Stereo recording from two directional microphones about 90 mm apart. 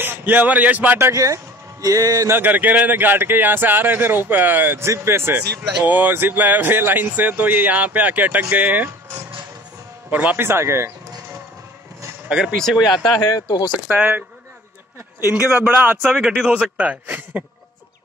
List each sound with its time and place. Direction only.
0.0 s speech: 20° right (ahead or behind)
0.9 s speech: 35° right (ahead or behind)
2.3 s speech: 20° right (ahead or behind)
12.3 s a man's voice: 10° right (ahead or behind)
12.5 s speech: 5° left (ahead or behind)
13.2 s speech: 45° left (ahead or behind)
13.8 s a man's voice: 15° right (ahead or behind)
15.6 s a man's voice: 20° right (ahead or behind)